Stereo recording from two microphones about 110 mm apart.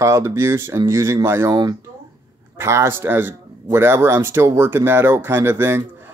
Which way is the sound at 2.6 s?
25° right (ahead or behind).